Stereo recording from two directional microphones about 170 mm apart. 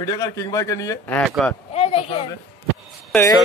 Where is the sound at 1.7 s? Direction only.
35° left (ahead or behind).